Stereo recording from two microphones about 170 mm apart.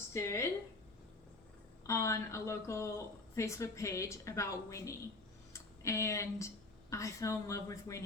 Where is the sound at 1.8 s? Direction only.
15° left (ahead or behind).